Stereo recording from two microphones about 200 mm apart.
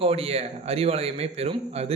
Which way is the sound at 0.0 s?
30° right (ahead or behind).